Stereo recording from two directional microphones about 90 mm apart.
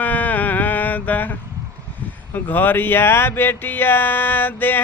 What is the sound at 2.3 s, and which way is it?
Speech, 20° left (ahead or behind).